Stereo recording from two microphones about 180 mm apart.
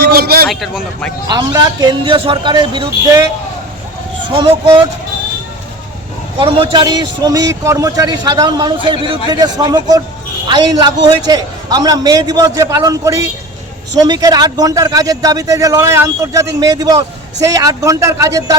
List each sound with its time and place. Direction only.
0.0 s a sound: 60° right (ahead or behind)
0.4 s a man's voice: centre (ahead or behind)
1.3 s a man's voice: 20° right (ahead or behind)
4.3 s a man's voice: 25° right (ahead or behind)
6.4 s a man's voice: 30° right (ahead or behind)